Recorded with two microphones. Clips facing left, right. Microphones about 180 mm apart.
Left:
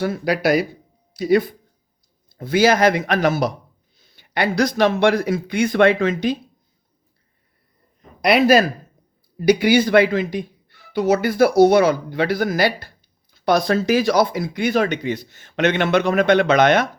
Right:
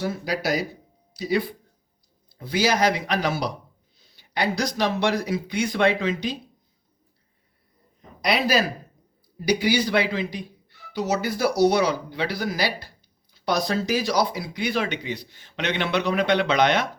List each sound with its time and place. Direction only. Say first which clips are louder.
0.0 s speech: left 7 dB; 60° left (ahead or behind)
8.2 s speech: left 8 dB; 55° left (ahead or behind)